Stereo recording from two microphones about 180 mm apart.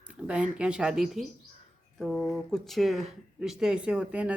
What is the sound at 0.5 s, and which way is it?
Speech, 5° right (ahead or behind).